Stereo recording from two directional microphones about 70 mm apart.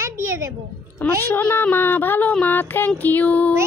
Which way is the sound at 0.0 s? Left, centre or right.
Right.